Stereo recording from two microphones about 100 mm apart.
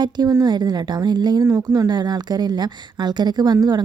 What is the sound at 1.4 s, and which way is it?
Speech, 35° right (ahead or behind).